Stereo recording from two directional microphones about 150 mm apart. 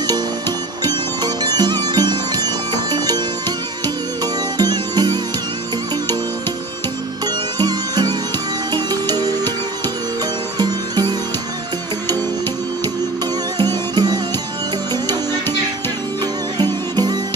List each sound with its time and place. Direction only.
0.8 s music: 25° right (ahead or behind)
7.5 s music: 25° right (ahead or behind)
10.6 s music: 30° right (ahead or behind)
13.6 s music: 30° right (ahead or behind)
16.5 s music: 25° right (ahead or behind)